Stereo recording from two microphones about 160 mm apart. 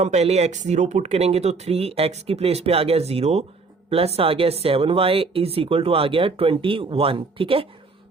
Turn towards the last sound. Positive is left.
turn(degrees=-35)  # may be behind; listen again after turning